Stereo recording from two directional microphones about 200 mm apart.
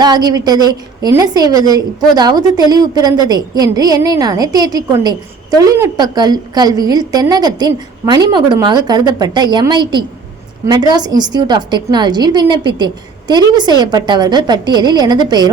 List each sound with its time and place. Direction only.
0.0 s a woman's voice: 20° right (ahead or behind)